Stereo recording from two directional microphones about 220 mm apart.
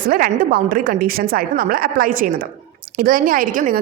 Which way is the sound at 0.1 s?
40° right (ahead or behind).